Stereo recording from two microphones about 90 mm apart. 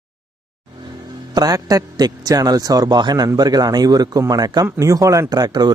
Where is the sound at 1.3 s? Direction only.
45° right (ahead or behind).